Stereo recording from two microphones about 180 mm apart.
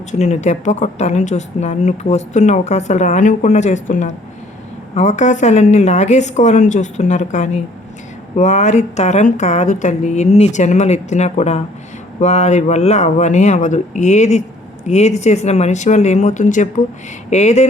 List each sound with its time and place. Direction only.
0.1 s a woman's voice: 40° left (ahead or behind)